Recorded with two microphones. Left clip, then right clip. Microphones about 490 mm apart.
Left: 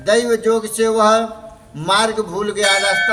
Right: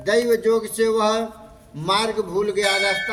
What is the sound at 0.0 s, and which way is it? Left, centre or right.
Music, right.